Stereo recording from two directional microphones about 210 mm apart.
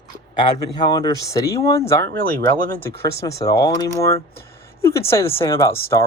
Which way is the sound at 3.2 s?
15° left (ahead or behind).